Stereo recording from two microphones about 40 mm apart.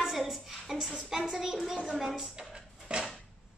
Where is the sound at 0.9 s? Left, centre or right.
Centre.